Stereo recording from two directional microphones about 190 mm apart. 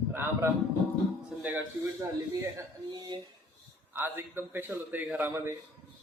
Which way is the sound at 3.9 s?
10° right (ahead or behind).